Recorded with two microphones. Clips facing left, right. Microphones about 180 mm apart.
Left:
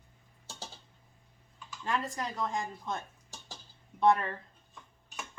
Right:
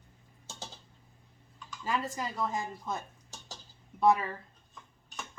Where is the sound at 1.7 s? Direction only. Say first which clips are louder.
Even; centre (ahead or behind).